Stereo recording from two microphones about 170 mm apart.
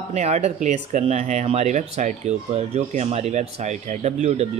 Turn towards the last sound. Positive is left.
turn(degrees=-40)  # may be behind; listen again after turning